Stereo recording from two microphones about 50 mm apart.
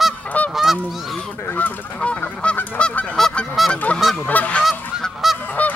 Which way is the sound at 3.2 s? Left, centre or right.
Centre.